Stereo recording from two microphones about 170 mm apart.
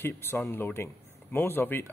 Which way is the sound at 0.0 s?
15° left (ahead or behind).